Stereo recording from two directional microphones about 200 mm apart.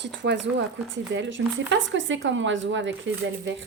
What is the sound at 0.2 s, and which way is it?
A woman's voice, 60° right (ahead or behind).